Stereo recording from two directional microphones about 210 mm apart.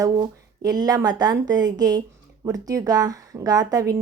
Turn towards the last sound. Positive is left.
turn(degrees=-15)  # may be behind; listen again after turning